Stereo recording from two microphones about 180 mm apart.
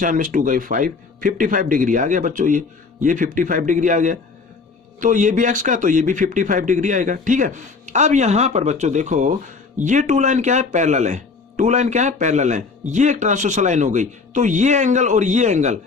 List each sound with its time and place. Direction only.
0.0 s speech: 50° right (ahead or behind)